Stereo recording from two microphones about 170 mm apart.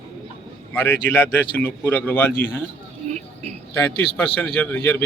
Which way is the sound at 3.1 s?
40° right (ahead or behind).